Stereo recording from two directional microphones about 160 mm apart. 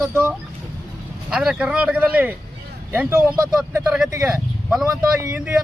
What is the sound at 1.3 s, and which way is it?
Speech, 5° right (ahead or behind).